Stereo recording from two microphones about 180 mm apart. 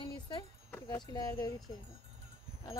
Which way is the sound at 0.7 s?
15° left (ahead or behind).